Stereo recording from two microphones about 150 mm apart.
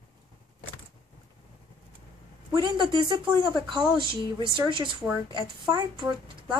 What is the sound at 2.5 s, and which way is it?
Speech, 30° right (ahead or behind).